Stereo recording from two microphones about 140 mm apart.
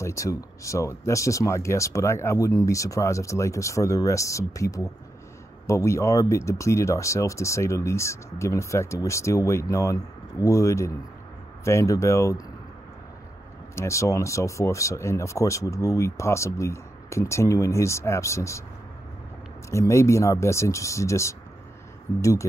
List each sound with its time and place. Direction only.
0.0 s speech: 20° left (ahead or behind)
13.7 s speech: 20° left (ahead or behind)
19.7 s speech: 20° left (ahead or behind)